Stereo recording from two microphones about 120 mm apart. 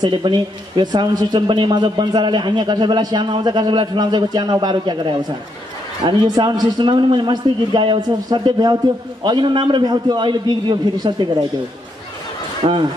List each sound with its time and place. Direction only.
0.0 s speech: 40° right (ahead or behind)
12.6 s speech: 45° right (ahead or behind)